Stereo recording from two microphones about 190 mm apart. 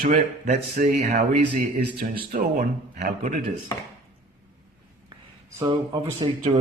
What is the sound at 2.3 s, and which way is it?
Speech, 45° right (ahead or behind).